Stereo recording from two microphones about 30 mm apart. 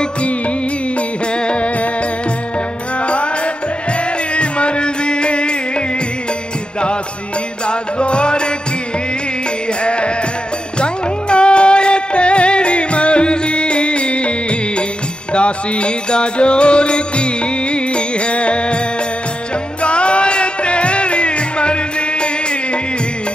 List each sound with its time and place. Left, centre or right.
1.3 s music: left
3.0 s music: left
4.3 s music: left
7.6 s music: left
9.8 s music: left
19.8 s music: left